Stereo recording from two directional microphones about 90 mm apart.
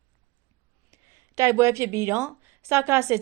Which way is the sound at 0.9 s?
35° right (ahead or behind).